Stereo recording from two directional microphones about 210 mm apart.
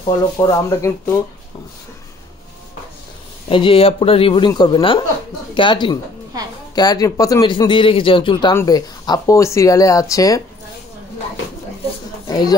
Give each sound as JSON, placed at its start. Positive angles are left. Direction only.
{"t": 0.4, "sound": "speech", "side_deg": 15}
{"t": 3.4, "sound": "speech", "side_deg": 25}
{"t": 12.3, "sound": "speech", "side_deg": 20}